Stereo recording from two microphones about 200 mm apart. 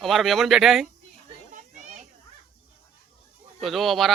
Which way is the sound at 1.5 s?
35° right (ahead or behind).